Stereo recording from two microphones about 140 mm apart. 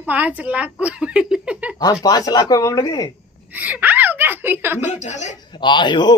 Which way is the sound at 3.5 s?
10° right (ahead or behind).